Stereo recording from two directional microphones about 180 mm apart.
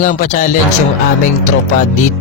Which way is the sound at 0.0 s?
45° left (ahead or behind).